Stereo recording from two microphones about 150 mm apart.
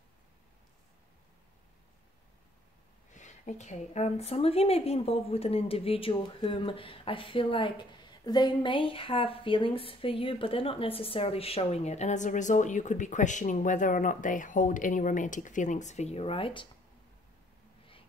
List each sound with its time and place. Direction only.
3.1 s speech: 55° left (ahead or behind); by 16.6 s 35° left (ahead or behind)